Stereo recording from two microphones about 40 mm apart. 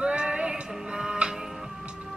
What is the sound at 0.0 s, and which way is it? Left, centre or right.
Music, right.